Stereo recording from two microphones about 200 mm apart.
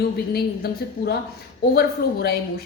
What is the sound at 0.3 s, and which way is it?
A woman's voice, 50° left (ahead or behind).